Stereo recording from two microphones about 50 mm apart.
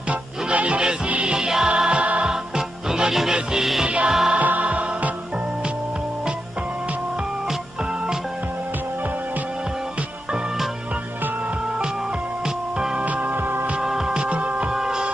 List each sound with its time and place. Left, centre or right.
0.1 s music: right
2.5 s music: centre
3.8 s music: right
4.1 s music: centre
4.4 s music: right
12.7 s music: centre
13.0 s music: right
13.7 s music: centre
14.7 s music: centre